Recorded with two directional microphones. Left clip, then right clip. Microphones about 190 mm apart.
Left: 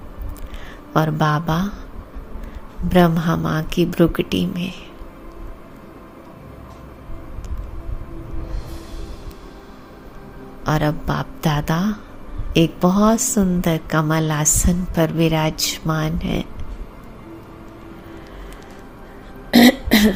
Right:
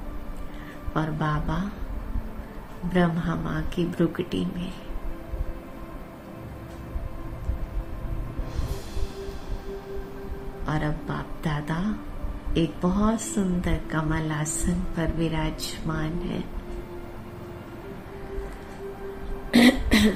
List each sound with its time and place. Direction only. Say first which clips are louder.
0.9 s speech: left 9 dB; 55° left (ahead or behind)
2.9 s a woman's voice: left 9 dB; 55° left (ahead or behind)
10.7 s a woman's voice: left 9 dB; 55° left (ahead or behind)
19.5 s cough: left 6 dB; 50° left (ahead or behind)